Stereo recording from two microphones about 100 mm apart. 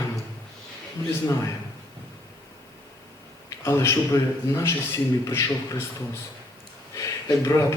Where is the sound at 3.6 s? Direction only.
25° left (ahead or behind).